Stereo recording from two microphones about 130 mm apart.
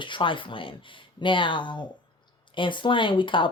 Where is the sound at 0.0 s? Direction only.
40° left (ahead or behind).